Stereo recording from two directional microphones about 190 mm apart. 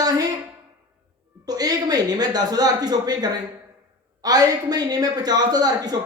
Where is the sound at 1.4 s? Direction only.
20° right (ahead or behind).